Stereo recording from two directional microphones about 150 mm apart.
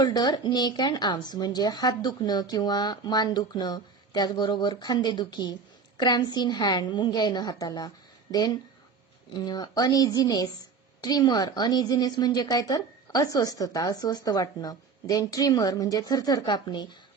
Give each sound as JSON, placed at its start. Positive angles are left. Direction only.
{"t": 0.0, "sound": "a woman's voice", "side_deg": 30}